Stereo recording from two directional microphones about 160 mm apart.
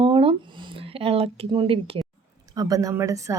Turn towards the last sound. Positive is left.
turn(degrees=-20)  # may be behind; listen again after turning